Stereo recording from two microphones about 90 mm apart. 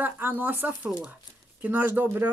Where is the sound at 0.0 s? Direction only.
20° right (ahead or behind).